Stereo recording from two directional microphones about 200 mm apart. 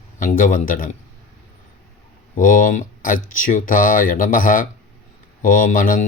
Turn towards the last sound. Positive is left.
turn(degrees=40)  # may be behind; listen again after turning